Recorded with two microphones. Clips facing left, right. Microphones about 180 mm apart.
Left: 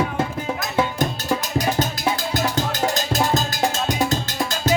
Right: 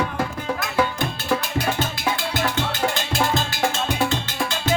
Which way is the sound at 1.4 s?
40° left (ahead or behind).